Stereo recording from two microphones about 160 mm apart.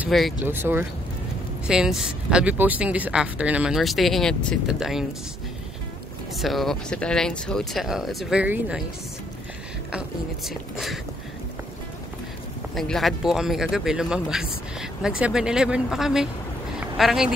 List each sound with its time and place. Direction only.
0.4 s speech: 15° right (ahead or behind)
6.3 s speech: centre (ahead or behind)
9.8 s speech: 5° right (ahead or behind)
12.7 s speech: centre (ahead or behind)